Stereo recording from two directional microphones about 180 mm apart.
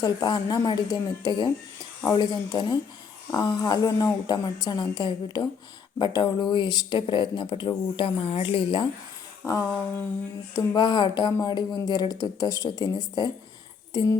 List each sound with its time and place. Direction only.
0.0 s speech: 20° left (ahead or behind)
9.4 s a sound: 20° left (ahead or behind)
10.5 s speech: 25° left (ahead or behind)